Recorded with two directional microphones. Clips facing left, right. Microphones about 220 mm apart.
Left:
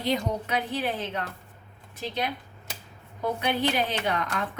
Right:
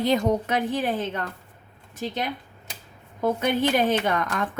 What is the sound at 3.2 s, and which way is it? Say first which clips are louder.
A woman's voice: right 4 dB; 50° right (ahead or behind).